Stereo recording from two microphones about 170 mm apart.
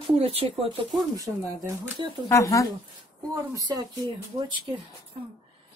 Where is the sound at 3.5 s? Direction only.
25° right (ahead or behind).